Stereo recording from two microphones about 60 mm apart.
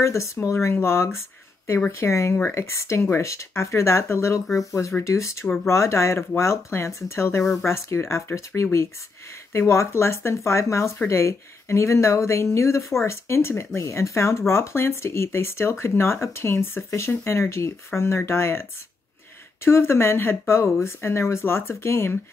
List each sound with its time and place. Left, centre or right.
0.0 s speech: left
4.6 s speech: left